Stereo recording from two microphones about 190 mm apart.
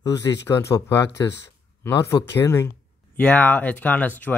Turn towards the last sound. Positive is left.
turn(degrees=10)  # may be behind; listen again after turning